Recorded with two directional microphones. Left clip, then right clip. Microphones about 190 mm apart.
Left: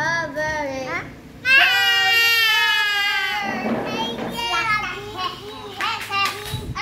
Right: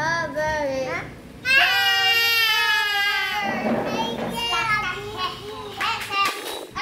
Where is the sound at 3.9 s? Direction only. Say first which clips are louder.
Even; 15° left (ahead or behind).